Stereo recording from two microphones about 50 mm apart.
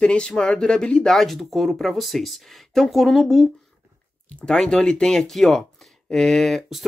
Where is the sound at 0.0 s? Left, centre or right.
Centre.